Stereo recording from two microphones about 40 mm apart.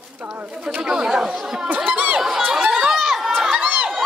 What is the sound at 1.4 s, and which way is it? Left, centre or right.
Speech, centre.